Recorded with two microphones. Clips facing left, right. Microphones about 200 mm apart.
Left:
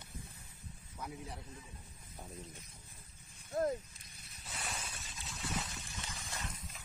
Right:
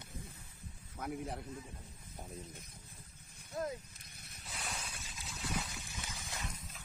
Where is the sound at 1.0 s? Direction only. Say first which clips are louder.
Right 6 dB; 55° right (ahead or behind).